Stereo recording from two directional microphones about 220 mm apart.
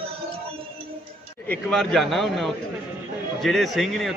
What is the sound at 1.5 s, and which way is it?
A man's voice, 5° left (ahead or behind).